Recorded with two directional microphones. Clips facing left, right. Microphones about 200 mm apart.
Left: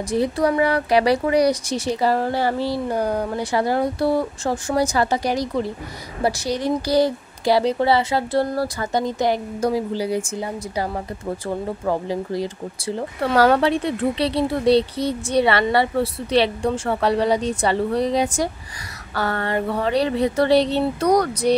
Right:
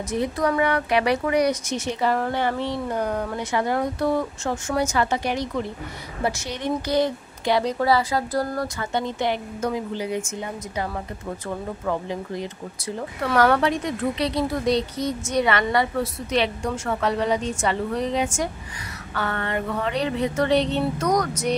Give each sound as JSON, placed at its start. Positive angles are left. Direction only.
{"t": 0.1, "sound": "speech", "side_deg": 30}